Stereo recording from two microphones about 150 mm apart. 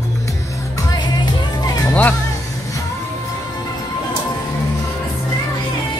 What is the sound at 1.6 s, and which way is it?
Music, 25° left (ahead or behind).